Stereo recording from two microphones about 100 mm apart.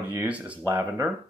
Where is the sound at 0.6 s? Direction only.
25° right (ahead or behind).